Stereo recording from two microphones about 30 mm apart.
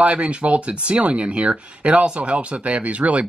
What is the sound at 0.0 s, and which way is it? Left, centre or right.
Speech, right.